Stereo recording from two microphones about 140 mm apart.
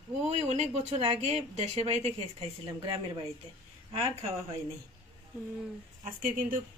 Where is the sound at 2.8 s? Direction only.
35° right (ahead or behind).